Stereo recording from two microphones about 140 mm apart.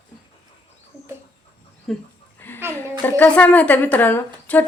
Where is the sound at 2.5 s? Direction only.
15° left (ahead or behind).